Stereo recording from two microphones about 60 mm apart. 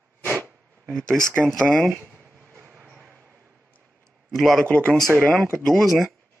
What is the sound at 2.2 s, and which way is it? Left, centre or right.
Train, right.